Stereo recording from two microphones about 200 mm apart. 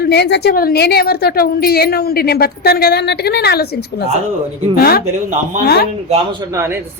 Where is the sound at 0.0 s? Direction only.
55° left (ahead or behind).